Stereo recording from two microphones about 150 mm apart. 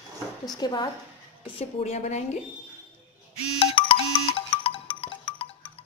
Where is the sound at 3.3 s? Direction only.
35° left (ahead or behind).